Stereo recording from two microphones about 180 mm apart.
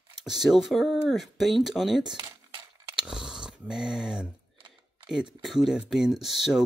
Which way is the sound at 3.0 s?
5° right (ahead or behind).